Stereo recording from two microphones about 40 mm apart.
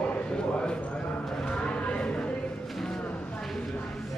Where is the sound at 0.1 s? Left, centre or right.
Left.